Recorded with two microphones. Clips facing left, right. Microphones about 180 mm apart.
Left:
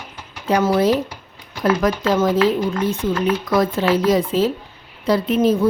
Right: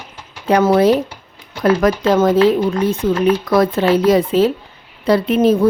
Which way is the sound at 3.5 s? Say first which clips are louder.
Right 4 dB; 60° right (ahead or behind).